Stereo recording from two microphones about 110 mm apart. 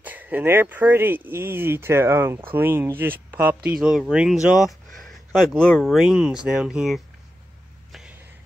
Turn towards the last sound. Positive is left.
turn(degrees=-5)  # may be behind; listen again after turning